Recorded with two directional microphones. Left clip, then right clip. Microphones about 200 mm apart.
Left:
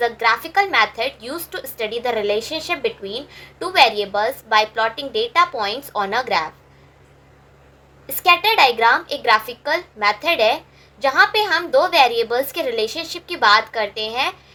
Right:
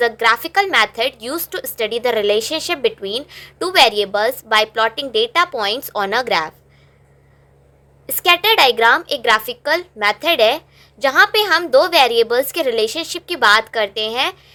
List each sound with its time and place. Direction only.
0.0 s a woman's voice: 50° right (ahead or behind)
8.0 s a woman's voice: 50° right (ahead or behind)